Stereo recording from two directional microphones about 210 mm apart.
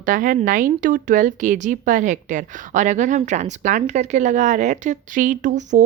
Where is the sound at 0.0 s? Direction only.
40° right (ahead or behind).